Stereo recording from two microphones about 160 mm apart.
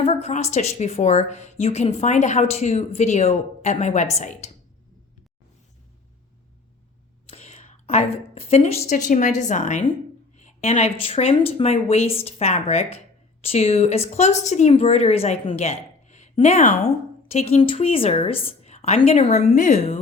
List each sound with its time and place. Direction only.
0.0 s a woman's voice: 40° left (ahead or behind)
7.3 s a woman's voice: 45° left (ahead or behind)